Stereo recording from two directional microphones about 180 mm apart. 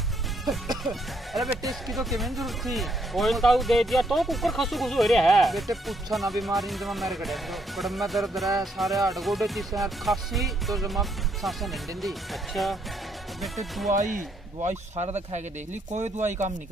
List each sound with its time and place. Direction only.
0.8 s speech: centre (ahead or behind)
13.8 s speech: 45° right (ahead or behind)